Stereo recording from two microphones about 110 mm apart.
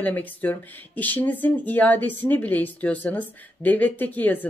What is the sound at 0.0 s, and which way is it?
A woman's voice, 15° left (ahead or behind).